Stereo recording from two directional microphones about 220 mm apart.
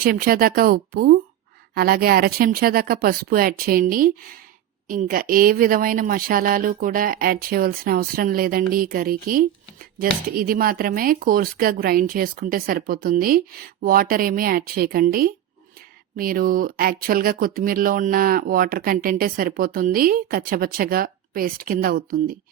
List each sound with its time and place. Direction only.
0.0 s speech: 40° right (ahead or behind)